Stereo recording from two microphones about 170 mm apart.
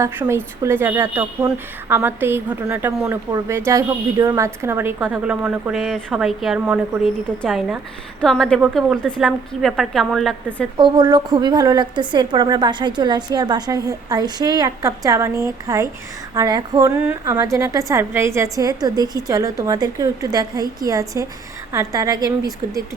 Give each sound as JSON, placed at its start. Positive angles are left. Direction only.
{"t": 0.0, "sound": "a woman's voice", "side_deg": -15}
{"t": 10.8, "sound": "a woman's voice", "side_deg": -25}